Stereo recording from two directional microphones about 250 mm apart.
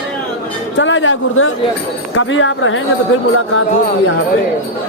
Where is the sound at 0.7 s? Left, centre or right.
Left.